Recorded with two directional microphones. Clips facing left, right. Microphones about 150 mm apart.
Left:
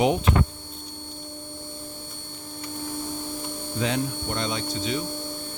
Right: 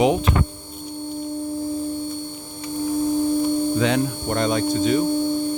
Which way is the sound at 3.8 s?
80° right.